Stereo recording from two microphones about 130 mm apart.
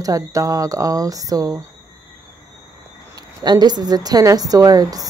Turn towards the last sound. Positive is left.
turn(degrees=-30)  # may be behind; listen again after turning